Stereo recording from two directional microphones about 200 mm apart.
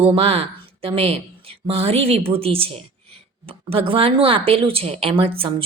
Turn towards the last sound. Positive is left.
turn(degrees=-25)  # may be behind; listen again after turning